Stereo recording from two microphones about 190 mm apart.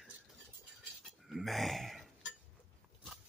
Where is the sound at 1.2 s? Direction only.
Centre (ahead or behind).